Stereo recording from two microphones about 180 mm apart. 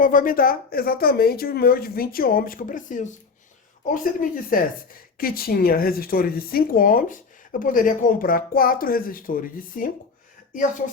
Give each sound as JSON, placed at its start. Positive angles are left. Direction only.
{"t": 0.0, "sound": "speech", "side_deg": 50}